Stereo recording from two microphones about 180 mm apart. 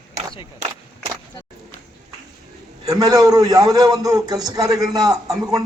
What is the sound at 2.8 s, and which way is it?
A man's voice, 20° right (ahead or behind).